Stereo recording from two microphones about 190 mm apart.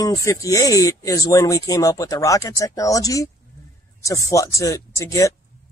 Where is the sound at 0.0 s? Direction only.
15° left (ahead or behind).